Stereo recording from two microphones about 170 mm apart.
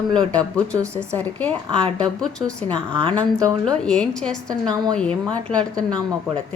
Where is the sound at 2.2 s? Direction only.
5° left (ahead or behind).